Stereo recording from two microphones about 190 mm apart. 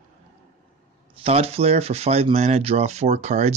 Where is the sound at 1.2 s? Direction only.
30° right (ahead or behind).